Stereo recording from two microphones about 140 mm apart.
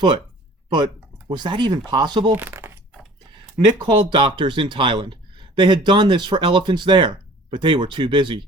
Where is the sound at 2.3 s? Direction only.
15° right (ahead or behind).